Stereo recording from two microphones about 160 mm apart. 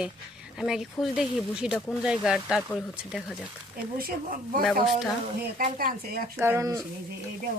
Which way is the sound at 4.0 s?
65° right (ahead or behind).